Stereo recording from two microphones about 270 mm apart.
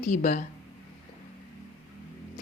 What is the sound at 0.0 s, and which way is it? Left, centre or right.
Speech, left.